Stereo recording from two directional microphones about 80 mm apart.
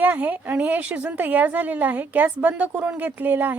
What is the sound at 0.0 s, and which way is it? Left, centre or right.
A woman's voice, right.